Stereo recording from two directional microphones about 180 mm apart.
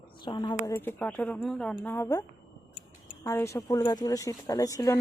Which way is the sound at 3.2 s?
15° left (ahead or behind).